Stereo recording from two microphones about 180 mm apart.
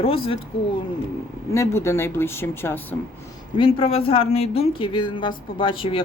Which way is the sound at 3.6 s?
30° left (ahead or behind).